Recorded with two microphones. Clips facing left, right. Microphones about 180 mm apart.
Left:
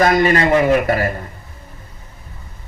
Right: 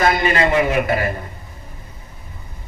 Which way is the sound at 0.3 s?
40° left (ahead or behind).